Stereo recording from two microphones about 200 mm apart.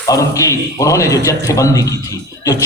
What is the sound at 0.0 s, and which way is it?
A man's voice, 15° left (ahead or behind).